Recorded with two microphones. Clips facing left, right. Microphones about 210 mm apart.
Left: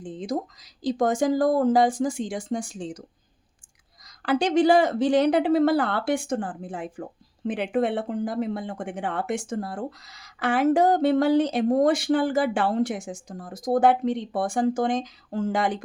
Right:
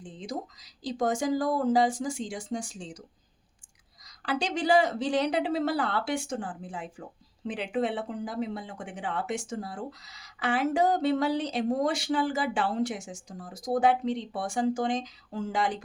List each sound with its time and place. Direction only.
0.0 s speech: 50° left (ahead or behind)
4.3 s speech: 50° left (ahead or behind)